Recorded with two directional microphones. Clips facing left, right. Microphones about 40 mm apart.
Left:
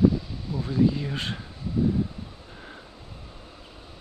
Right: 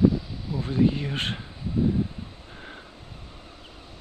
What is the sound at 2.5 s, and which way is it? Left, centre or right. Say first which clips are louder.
Vehicle: right 2 dB; centre.